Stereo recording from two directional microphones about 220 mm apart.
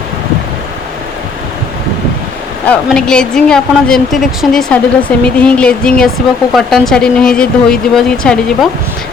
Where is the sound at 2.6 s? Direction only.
5° left (ahead or behind).